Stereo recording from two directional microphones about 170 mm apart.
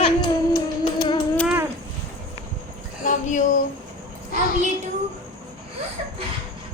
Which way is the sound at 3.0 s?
50° left (ahead or behind).